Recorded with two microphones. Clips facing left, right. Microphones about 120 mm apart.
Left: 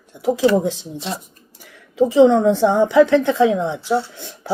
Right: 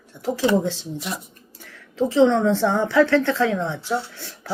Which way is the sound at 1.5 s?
15° left (ahead or behind).